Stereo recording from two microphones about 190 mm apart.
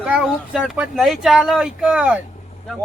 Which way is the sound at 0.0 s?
5° right (ahead or behind).